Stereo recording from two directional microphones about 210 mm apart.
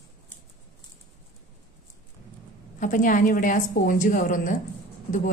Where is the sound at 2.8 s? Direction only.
40° left (ahead or behind).